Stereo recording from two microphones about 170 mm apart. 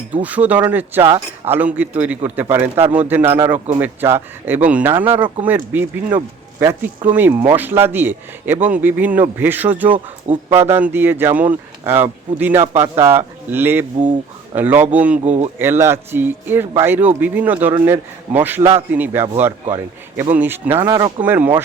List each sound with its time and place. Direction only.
0.1 s a man's voice: 10° right (ahead or behind)
15.2 s speech: 40° right (ahead or behind)
15.5 s a man's voice: 15° right (ahead or behind)
20.3 s a man's voice: 10° right (ahead or behind)
20.8 s speech: 25° right (ahead or behind)
21.2 s a man's voice: 10° right (ahead or behind)